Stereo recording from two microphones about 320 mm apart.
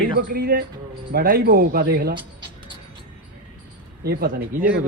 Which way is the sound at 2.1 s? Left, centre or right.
Centre.